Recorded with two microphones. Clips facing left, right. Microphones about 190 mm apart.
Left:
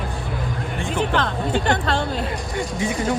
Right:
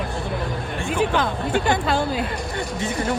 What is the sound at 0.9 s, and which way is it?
Speech, 10° right (ahead or behind).